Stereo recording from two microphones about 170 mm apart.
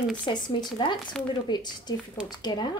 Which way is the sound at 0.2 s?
25° left (ahead or behind).